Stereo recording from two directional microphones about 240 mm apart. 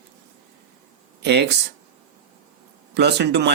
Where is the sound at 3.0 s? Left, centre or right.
Right.